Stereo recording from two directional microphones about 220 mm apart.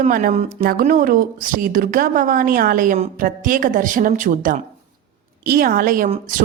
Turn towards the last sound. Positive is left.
turn(degrees=-30)  # may be behind; listen again after turning